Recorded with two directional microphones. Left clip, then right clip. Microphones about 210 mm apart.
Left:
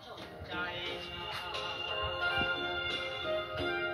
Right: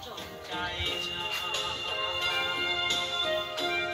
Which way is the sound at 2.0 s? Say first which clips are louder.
Right 3 dB; 25° left (ahead or behind).